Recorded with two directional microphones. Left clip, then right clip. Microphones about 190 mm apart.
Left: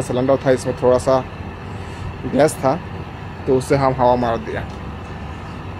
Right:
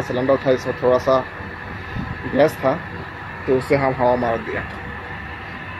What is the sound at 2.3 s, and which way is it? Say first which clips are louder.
Speech: left 1 dB; 20° left (ahead or behind).